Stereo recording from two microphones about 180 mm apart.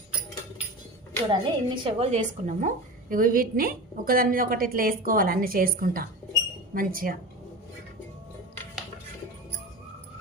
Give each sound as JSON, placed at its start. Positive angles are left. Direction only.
{"t": 1.3, "sound": "a woman's voice", "side_deg": -25}